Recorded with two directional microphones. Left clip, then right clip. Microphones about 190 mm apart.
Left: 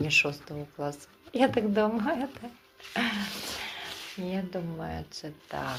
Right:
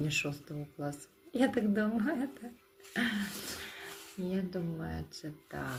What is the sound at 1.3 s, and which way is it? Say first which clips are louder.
Speech: left 6 dB; 20° right (ahead or behind).